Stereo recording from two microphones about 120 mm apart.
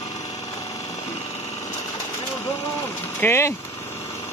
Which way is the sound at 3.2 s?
20° left (ahead or behind).